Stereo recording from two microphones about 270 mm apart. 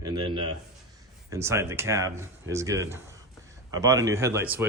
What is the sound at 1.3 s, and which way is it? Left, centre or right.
A man's voice, centre.